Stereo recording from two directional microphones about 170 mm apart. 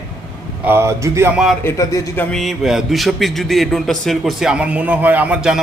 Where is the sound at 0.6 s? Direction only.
15° right (ahead or behind).